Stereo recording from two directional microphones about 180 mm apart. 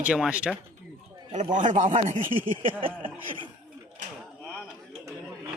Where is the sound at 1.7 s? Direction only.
30° right (ahead or behind).